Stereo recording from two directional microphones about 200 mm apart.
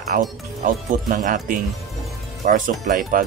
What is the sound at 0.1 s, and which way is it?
Speech, 45° right (ahead or behind).